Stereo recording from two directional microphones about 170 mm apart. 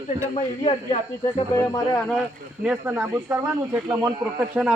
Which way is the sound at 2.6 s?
5° right (ahead or behind).